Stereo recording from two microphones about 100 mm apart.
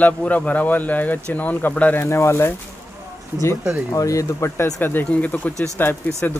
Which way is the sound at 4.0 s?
35° left (ahead or behind).